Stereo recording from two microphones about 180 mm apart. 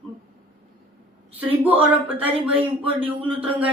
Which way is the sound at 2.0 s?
10° right (ahead or behind).